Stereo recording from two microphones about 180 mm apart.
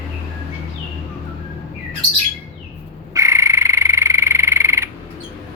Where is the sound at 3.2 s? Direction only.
15° right (ahead or behind).